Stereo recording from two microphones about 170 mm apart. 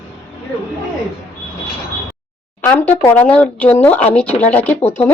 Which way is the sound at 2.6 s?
10° left (ahead or behind).